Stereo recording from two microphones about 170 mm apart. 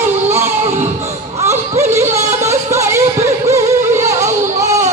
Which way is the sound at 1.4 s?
15° right (ahead or behind).